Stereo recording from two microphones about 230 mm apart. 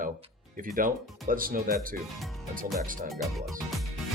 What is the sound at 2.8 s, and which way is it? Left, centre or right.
Speech, right.